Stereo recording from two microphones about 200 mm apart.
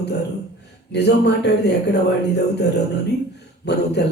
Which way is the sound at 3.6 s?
55° left (ahead or behind).